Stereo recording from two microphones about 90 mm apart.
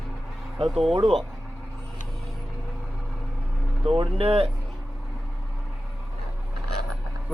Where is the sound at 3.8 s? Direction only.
80° right.